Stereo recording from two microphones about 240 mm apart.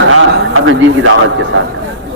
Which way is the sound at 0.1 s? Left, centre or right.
Right.